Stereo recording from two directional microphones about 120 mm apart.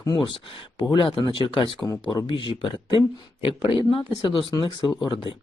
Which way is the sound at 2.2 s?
45° left (ahead or behind).